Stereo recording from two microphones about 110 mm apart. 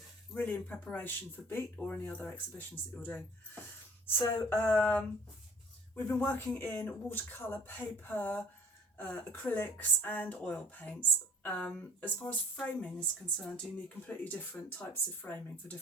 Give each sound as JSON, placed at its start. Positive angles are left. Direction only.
{"t": 0.3, "sound": "speech", "side_deg": 15}